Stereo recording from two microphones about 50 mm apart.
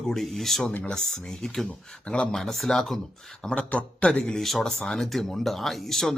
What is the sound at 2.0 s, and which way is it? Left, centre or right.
Speech, left.